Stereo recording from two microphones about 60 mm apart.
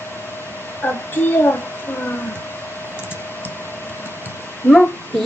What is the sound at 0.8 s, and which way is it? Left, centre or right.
Speech, left.